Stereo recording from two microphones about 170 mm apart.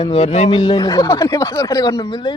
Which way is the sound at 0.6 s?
20° left (ahead or behind).